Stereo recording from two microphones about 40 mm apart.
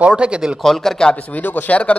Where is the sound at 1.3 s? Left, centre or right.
Left.